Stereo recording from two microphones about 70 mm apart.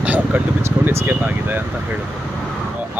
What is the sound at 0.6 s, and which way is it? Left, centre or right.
Speech, right.